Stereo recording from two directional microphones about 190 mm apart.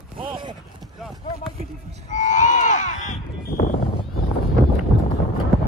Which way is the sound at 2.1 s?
40° left (ahead or behind).